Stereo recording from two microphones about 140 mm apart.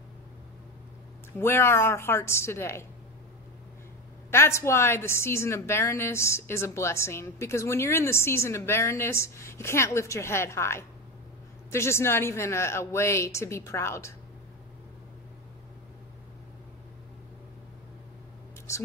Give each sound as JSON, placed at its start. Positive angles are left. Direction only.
{"t": 1.4, "sound": "a woman's voice", "side_deg": 15}
{"t": 4.3, "sound": "a woman's voice", "side_deg": 20}
{"t": 18.7, "sound": "a woman's voice", "side_deg": 20}